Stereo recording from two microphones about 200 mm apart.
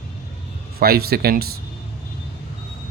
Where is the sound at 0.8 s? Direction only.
50° right (ahead or behind).